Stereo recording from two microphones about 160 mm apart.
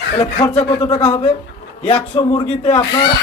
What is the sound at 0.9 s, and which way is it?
Speech, 35° left (ahead or behind).